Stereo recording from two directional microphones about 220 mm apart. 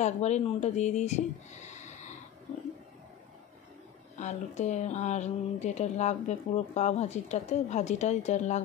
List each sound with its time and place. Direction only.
0.0 s speech: 30° left (ahead or behind)
4.2 s speech: 30° left (ahead or behind)